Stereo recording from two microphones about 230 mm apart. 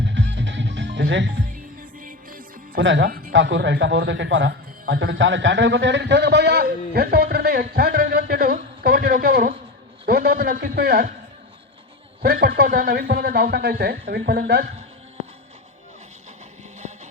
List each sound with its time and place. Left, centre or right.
0.0 s music: right
1.5 s music: right
2.8 s speech: right
3.3 s a man's voice: right
12.2 s speech: right